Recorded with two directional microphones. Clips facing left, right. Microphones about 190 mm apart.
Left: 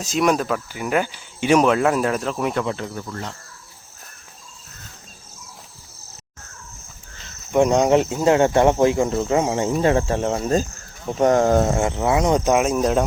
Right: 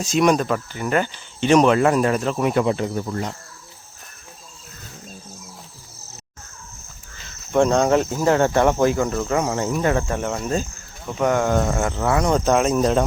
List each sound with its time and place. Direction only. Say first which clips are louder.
0.0 s speech: right 2 dB; centre (ahead or behind)
2.6 s speech: right 5 dB; 20° right (ahead or behind)
7.5 s speech: left 1 dB; 15° left (ahead or behind)